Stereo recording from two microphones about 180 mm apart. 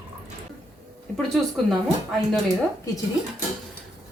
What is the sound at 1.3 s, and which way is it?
Speech, centre (ahead or behind).